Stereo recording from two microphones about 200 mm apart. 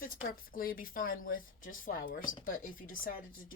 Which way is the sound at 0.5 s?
45° left (ahead or behind).